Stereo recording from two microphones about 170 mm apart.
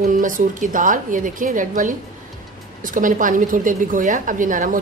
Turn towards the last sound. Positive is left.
turn(degrees=-50)  # may be behind; listen again after turning